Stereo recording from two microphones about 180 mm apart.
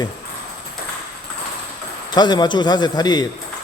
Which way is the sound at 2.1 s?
25° left (ahead or behind).